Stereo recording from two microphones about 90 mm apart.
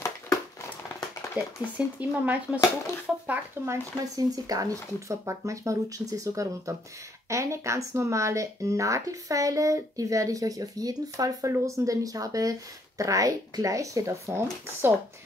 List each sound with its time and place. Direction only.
1.4 s speech: 15° right (ahead or behind)
3.6 s speech: 25° right (ahead or behind)
4.0 s speech: 40° right (ahead or behind)